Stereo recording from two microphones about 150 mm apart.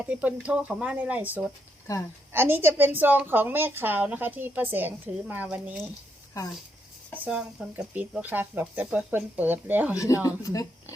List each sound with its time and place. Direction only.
0.0 s a woman's voice: 10° right (ahead or behind)
7.3 s a woman's voice: 5° right (ahead or behind)
9.9 s speech: 20° left (ahead or behind)